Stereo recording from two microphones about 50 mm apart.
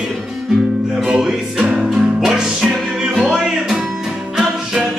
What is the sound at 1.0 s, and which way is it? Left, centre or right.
Music, centre.